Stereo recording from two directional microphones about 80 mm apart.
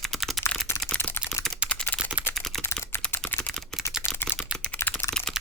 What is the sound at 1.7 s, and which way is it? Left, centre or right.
Typing, centre.